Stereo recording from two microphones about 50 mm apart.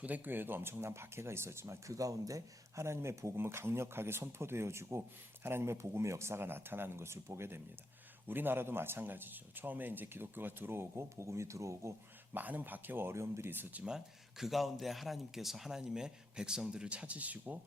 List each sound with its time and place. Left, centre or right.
0.0 s speech: right
8.3 s a man's voice: right
12.3 s speech: right
13.1 s speech: right
13.5 s speech: right
13.8 s a man's voice: centre; by 17.6 s right